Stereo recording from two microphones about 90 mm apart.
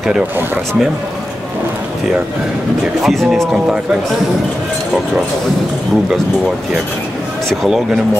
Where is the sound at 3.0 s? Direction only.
Centre (ahead or behind).